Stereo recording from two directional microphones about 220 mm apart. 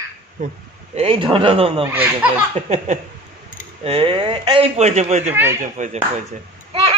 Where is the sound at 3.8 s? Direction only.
25° right (ahead or behind).